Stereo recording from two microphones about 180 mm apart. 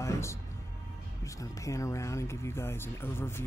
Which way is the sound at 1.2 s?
15° left (ahead or behind).